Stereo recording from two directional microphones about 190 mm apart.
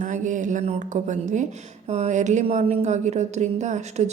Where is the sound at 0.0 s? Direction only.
40° right (ahead or behind).